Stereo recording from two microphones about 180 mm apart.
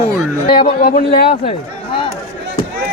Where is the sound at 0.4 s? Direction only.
25° left (ahead or behind).